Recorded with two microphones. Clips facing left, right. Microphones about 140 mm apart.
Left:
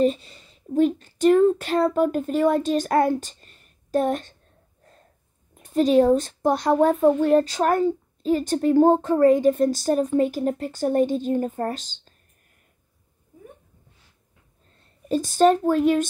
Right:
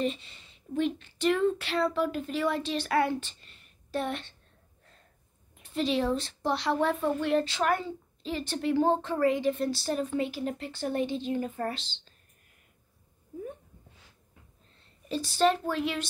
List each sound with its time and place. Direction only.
0.0 s speech: 40° left (ahead or behind)
5.5 s speech: 45° left (ahead or behind)
14.8 s speech: 45° left (ahead or behind)